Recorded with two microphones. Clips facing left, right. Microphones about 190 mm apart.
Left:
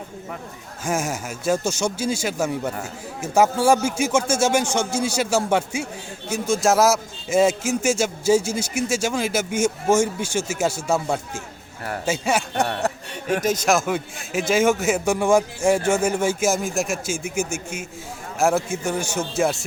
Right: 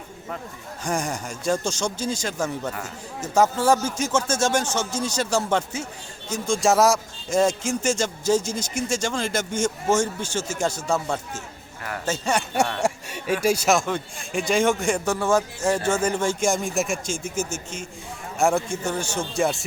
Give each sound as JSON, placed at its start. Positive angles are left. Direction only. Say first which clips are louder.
{"t": 0.9, "sound": "speech", "louder": "left 2 dB", "side_deg": 5}
{"t": 12.8, "sound": "a sound", "louder": "right 1 dB", "side_deg": -10}
{"t": 13.4, "sound": "speech", "louder": "right 1 dB", "side_deg": -10}
{"t": 13.7, "sound": "speech", "louder": "left 2 dB", "side_deg": 5}